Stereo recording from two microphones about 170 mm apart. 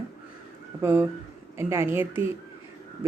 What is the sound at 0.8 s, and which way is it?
Speech, 15° right (ahead or behind).